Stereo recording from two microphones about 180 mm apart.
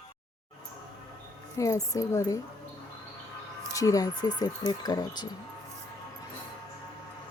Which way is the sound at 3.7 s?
20° left (ahead or behind).